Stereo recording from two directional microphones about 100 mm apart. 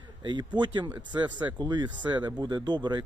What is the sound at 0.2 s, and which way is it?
Speech, 50° right (ahead or behind).